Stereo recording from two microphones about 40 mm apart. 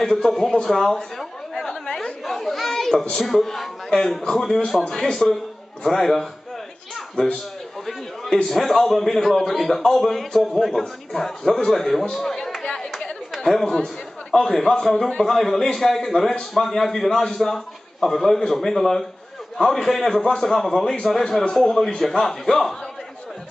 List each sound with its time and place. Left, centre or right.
0.0 s a man's voice: centre
1.7 s chatter: centre
2.2 s children playing: centre
3.2 s a man's voice: centre
8.3 s a man's voice: centre
12.6 s chatter: centre
13.3 s a man's voice: centre